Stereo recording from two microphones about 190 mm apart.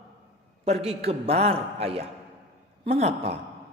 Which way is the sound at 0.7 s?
30° right (ahead or behind).